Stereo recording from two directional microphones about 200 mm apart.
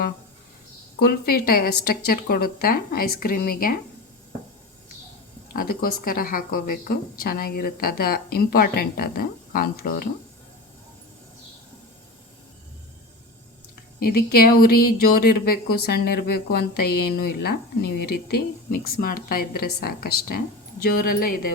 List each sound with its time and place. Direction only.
0.9 s speech: 50° left (ahead or behind)
5.5 s speech: 45° left (ahead or behind)
14.0 s speech: 50° left (ahead or behind)